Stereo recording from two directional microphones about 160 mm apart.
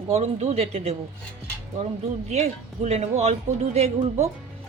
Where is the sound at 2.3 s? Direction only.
45° right (ahead or behind).